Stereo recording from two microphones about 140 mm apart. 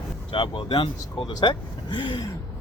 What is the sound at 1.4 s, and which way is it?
Speech, 35° left (ahead or behind).